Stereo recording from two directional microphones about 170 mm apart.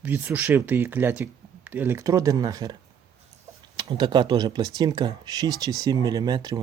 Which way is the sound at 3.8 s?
25° right (ahead or behind).